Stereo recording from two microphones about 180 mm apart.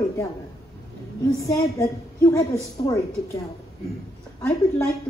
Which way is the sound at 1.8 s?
20° left (ahead or behind).